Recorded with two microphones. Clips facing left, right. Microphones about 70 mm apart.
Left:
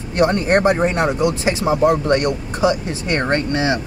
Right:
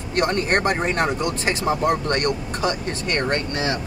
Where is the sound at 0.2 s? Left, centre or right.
Centre.